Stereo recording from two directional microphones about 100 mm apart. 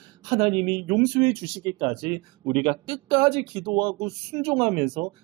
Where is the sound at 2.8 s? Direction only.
50° right (ahead or behind).